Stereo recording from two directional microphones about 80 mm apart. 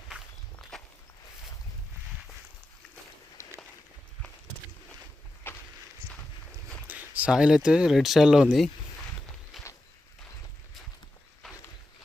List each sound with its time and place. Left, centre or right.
0.7 s walk: centre
5.5 s walk: left
6.8 s a sound: right
7.3 s speech: centre
11.4 s walk: centre